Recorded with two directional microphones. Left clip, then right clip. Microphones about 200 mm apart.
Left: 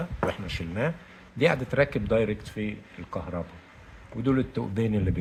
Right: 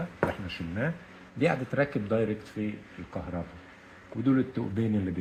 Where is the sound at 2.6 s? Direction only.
60° left (ahead or behind).